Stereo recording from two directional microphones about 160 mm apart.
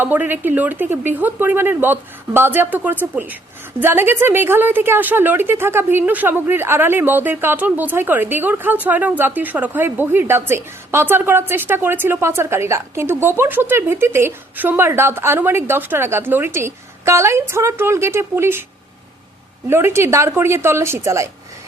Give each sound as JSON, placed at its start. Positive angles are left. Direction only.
{"t": 0.0, "sound": "a woman's voice", "side_deg": -10}
{"t": 19.7, "sound": "a woman's voice", "side_deg": -15}